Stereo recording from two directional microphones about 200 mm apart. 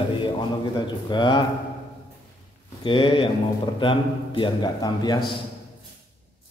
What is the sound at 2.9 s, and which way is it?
Speech, 25° left (ahead or behind).